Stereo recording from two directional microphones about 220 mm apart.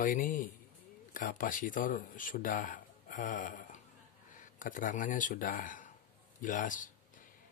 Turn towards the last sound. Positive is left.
turn(degrees=35)  # may be behind; listen again after turning